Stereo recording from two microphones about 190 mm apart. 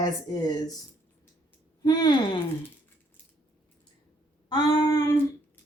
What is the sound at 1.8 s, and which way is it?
Speech, 20° left (ahead or behind).